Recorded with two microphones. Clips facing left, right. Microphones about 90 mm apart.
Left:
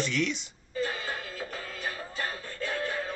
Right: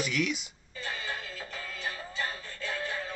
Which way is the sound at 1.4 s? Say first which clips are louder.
Left 3 dB; 45° left (ahead or behind).